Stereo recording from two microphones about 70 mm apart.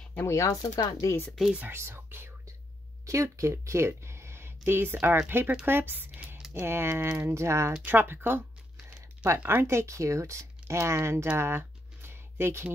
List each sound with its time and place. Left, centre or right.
0.3 s speech: left
1.7 s speech: right
3.1 s speech: right
6.3 s a sound: centre
6.6 s speech: right
7.8 s speech: right
9.4 s speech: right
9.7 s speech: right
11.3 s a sound: right